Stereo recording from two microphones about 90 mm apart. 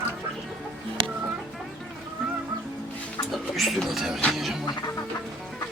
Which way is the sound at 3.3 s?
Centre (ahead or behind).